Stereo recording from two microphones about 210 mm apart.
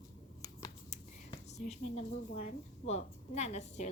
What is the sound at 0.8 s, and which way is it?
Speech, 30° left (ahead or behind).